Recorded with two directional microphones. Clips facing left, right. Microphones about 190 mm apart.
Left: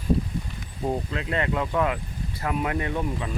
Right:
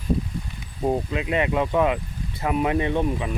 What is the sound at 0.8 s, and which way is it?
Speech, 15° right (ahead or behind).